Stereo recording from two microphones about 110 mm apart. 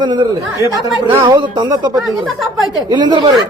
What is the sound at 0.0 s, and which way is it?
A man's voice, 45° right (ahead or behind).